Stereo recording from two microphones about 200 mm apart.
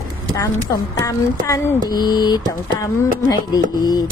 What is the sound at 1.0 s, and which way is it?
A woman's voice, 15° left (ahead or behind).